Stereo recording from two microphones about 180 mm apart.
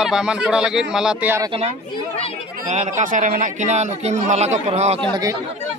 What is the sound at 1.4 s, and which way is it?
A man's voice, 35° right (ahead or behind).